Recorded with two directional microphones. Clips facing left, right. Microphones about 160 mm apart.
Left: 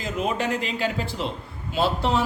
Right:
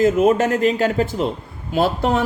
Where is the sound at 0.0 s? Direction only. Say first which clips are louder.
Right 11 dB; 45° right (ahead or behind).